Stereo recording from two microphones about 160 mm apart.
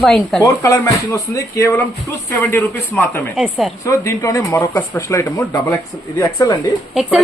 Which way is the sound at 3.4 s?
5° right (ahead or behind).